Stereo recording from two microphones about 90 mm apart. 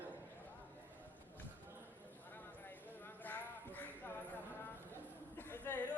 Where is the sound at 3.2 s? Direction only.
20° left (ahead or behind).